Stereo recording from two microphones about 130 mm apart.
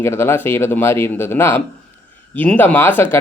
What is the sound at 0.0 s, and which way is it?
Speech, 20° left (ahead or behind).